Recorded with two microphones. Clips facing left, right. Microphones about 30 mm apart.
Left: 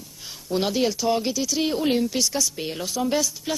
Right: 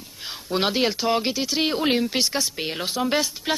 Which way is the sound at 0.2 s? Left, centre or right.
Right.